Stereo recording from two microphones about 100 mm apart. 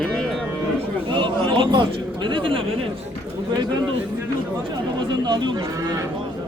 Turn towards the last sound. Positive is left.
turn(degrees=-50)  # may be behind; listen again after turning